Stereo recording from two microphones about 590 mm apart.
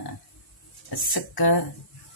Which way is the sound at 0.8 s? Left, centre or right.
Left.